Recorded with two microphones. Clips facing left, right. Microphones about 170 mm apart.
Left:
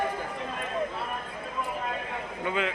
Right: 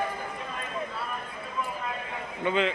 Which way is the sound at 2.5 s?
5° left (ahead or behind).